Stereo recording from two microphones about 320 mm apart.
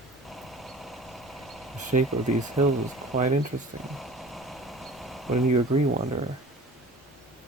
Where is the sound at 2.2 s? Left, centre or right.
Right.